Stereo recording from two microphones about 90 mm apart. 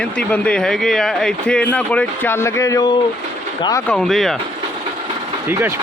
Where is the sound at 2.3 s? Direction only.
30° left (ahead or behind).